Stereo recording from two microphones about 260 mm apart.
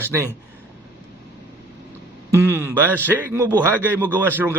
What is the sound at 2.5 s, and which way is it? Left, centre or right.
A man's voice, centre.